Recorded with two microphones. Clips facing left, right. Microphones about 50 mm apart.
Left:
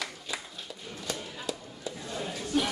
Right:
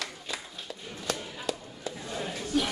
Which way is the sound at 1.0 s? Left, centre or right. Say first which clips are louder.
Right 3 dB; right.